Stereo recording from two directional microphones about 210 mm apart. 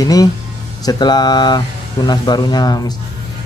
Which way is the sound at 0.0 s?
15° left (ahead or behind).